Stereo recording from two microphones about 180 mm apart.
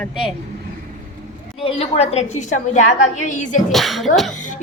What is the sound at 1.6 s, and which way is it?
A woman's voice, 35° left (ahead or behind).